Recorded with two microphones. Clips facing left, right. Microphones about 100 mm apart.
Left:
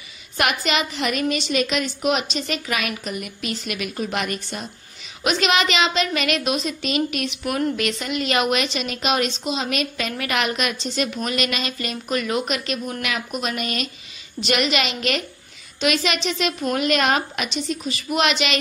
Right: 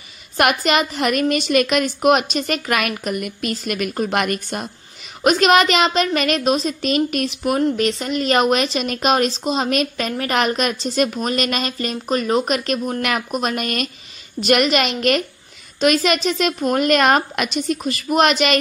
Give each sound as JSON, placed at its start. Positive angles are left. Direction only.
{"t": 0.4, "sound": "a woman's voice", "side_deg": -50}